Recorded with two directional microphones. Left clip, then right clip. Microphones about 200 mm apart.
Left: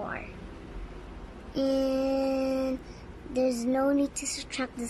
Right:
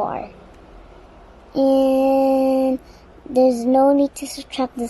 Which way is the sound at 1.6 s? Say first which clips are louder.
Right 12 dB; 60° right (ahead or behind).